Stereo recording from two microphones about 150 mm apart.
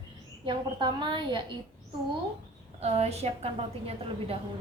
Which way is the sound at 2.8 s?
45° right (ahead or behind).